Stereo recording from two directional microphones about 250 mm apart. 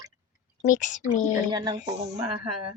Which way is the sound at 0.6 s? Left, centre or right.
Left.